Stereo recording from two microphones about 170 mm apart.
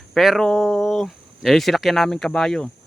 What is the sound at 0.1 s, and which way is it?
Speech, centre (ahead or behind).